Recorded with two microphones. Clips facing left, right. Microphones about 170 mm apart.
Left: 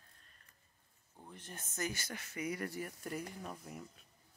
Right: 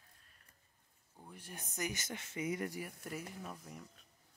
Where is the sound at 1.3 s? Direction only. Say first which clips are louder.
Even; 10° right (ahead or behind).